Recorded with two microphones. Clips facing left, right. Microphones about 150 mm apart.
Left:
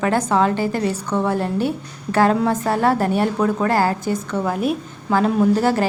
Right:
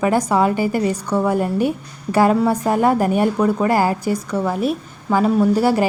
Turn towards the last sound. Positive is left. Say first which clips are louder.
# right 1 dB
turn(degrees=-10)  # may be behind; listen again after turning